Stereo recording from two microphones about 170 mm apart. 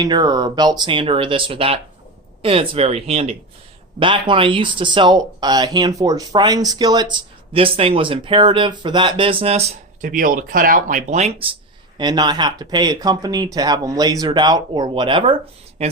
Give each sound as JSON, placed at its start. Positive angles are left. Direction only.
{"t": 0.0, "sound": "speech", "side_deg": -25}
{"t": 11.9, "sound": "speech", "side_deg": -25}